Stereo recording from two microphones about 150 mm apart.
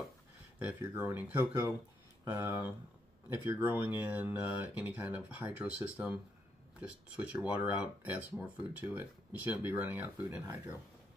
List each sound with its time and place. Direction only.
0.6 s speech: 10° right (ahead or behind)